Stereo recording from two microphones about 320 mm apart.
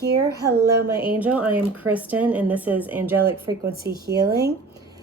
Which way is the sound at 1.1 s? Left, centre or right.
Centre.